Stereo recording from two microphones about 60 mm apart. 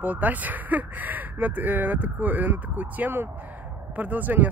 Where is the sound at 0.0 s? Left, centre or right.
Right.